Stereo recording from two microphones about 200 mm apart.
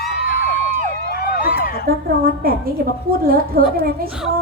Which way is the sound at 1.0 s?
50° left (ahead or behind).